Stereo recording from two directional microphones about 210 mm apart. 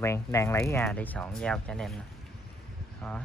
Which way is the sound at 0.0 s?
15° left (ahead or behind).